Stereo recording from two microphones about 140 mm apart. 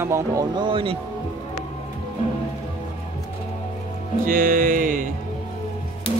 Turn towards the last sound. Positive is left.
turn(degrees=-75)  # may be behind; listen again after turning